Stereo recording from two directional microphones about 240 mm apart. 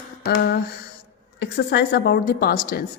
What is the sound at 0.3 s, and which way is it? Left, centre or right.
A woman's voice, left.